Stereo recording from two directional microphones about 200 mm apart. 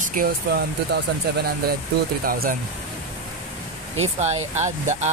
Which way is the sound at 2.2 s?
45° right (ahead or behind).